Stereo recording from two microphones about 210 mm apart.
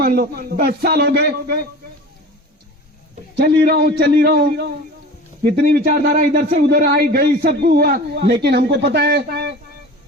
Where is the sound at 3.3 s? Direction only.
50° right (ahead or behind).